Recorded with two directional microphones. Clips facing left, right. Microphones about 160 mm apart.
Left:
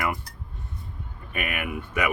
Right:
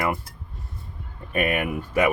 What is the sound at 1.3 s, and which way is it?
Speech, 35° right (ahead or behind).